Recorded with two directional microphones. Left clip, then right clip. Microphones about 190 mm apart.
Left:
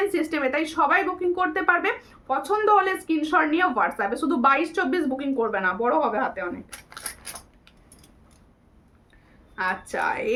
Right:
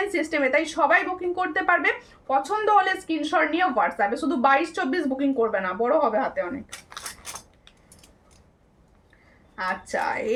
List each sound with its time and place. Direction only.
0.1 s a woman's voice: 20° left (ahead or behind)
9.6 s speech: 15° left (ahead or behind)